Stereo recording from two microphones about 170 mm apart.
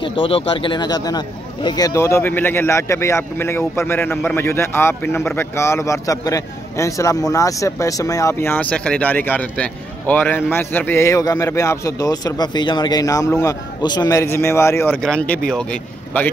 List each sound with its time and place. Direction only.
0.0 s speech: 30° left (ahead or behind); by 16.3 s 10° left (ahead or behind)